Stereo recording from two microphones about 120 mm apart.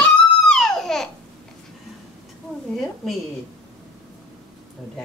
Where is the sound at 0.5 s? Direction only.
5° left (ahead or behind).